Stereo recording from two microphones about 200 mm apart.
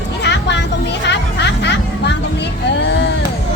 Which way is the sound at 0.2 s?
60° left (ahead or behind).